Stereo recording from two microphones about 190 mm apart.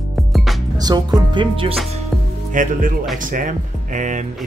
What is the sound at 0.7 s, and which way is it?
Music, 20° right (ahead or behind).